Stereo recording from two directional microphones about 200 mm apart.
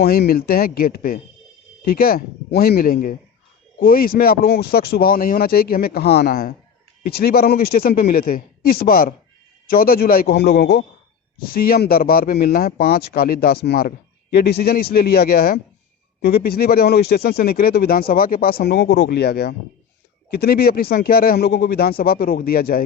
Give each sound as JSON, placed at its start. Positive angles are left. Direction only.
{"t": 0.0, "sound": "speech", "side_deg": 50}